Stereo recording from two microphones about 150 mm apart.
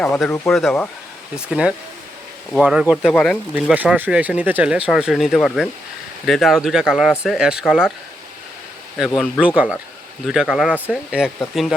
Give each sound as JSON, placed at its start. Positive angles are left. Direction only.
{"t": 0.3, "sound": "speech", "side_deg": 15}
{"t": 1.5, "sound": "speech", "side_deg": -5}
{"t": 9.0, "sound": "speech", "side_deg": 10}
{"t": 9.4, "sound": "speech", "side_deg": -10}